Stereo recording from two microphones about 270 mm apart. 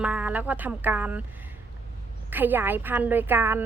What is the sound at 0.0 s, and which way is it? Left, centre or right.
Speech, centre.